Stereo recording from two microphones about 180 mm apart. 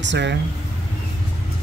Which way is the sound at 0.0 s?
80° right.